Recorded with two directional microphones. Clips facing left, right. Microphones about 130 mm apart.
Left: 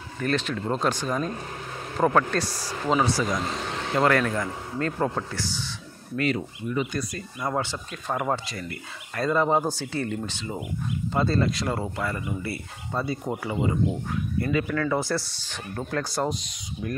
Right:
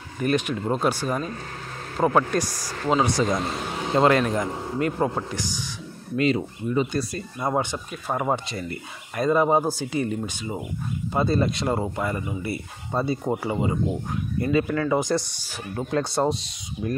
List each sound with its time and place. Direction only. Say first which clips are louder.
0.2 s a man's voice: right 3 dB; 15° right (ahead or behind)
3.9 s a man's voice: right 3 dB; 25° right (ahead or behind)
7.5 s a man's voice: right 3 dB; 15° right (ahead or behind)
8.5 s speech: right 3 dB; 25° right (ahead or behind)
9.2 s a man's voice: right 3 dB; 15° right (ahead or behind)
15.9 s speech: right 5 dB; 25° right (ahead or behind)